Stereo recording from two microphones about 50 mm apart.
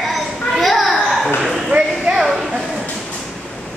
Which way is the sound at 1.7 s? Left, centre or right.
Right.